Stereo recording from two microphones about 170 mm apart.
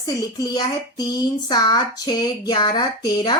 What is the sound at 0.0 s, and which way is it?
Speech, 20° left (ahead or behind).